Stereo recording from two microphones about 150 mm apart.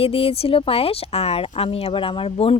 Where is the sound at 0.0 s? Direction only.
40° left (ahead or behind).